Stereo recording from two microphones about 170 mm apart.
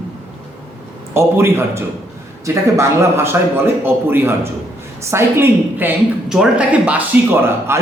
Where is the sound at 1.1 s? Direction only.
15° right (ahead or behind).